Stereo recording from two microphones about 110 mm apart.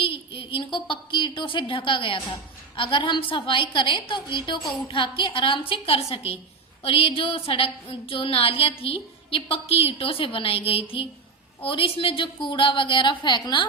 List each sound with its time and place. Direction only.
0.0 s a woman's voice: 55° left (ahead or behind)